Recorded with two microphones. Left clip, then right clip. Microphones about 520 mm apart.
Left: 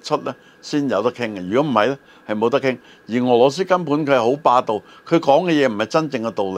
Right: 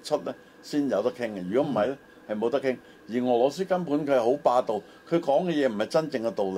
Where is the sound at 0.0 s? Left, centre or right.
Left.